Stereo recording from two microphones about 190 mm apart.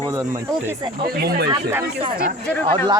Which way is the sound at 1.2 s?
55° right (ahead or behind).